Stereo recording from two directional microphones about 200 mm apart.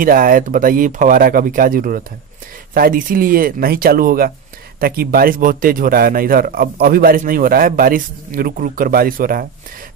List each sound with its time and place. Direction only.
0.0 s speech: 45° right (ahead or behind)